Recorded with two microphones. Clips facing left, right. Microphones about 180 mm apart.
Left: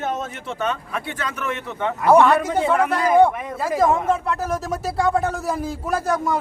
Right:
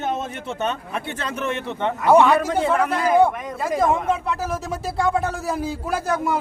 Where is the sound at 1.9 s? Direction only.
Centre (ahead or behind).